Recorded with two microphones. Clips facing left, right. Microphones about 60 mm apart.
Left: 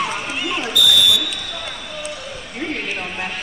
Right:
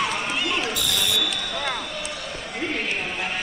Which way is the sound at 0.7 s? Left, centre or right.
Right.